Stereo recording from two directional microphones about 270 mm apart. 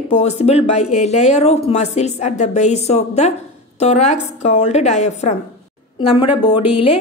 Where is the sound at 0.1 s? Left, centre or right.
Left.